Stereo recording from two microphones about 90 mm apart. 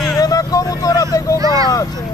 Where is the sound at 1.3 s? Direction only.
40° right (ahead or behind).